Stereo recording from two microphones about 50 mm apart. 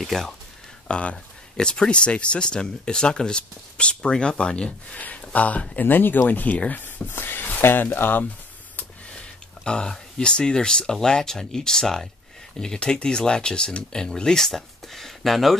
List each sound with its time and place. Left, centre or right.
0.0 s speech: centre
0.8 s speech: left
4.9 s speech: left
9.7 s speech: centre